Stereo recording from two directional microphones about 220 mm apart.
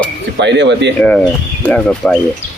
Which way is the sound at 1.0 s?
5° left (ahead or behind).